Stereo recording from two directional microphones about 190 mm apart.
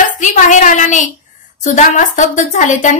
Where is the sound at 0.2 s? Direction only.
40° left (ahead or behind).